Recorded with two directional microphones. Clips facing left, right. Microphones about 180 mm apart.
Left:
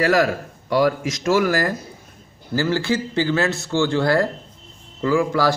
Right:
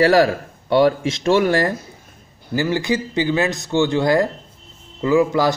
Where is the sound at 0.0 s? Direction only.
30° right (ahead or behind).